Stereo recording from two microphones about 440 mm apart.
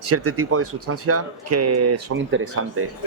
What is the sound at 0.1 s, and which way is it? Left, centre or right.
Speech, right.